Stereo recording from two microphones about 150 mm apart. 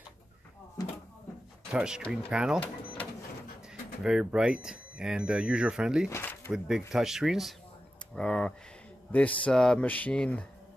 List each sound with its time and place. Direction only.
1.7 s speech: 5° right (ahead or behind)
4.0 s speech: 5° right (ahead or behind)
6.0 s a sound: 15° left (ahead or behind)
6.9 s speech: 5° right (ahead or behind)